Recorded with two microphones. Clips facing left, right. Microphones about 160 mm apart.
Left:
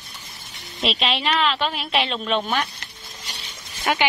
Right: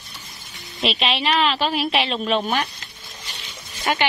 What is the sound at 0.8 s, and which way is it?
Speech, centre (ahead or behind).